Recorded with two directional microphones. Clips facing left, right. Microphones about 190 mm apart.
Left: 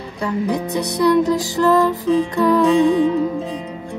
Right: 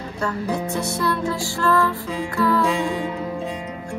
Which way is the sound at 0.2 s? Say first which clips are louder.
Left 4 dB; 15° left (ahead or behind).